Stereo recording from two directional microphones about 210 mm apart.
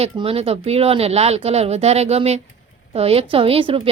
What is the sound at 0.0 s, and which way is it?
Speech, 30° right (ahead or behind).